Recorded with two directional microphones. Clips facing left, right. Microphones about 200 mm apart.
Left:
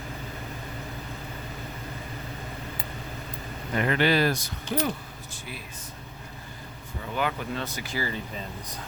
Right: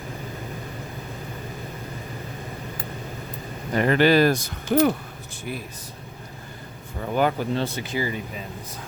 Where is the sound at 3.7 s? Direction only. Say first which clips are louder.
Right 6 dB; 40° right (ahead or behind).